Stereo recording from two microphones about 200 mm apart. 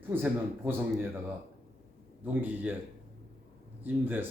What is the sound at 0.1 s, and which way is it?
Speech, 10° right (ahead or behind).